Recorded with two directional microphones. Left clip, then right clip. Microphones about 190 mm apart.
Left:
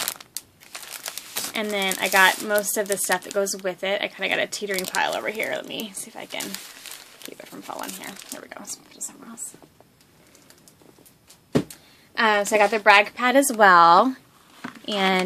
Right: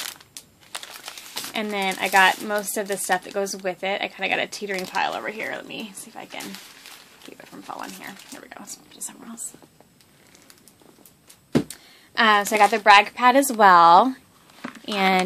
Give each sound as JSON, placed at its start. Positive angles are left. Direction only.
{"t": 0.1, "sound": "crumpling", "side_deg": 50}
{"t": 1.5, "sound": "speech", "side_deg": 0}
{"t": 7.4, "sound": "speech", "side_deg": 10}
{"t": 12.1, "sound": "a woman's voice", "side_deg": -10}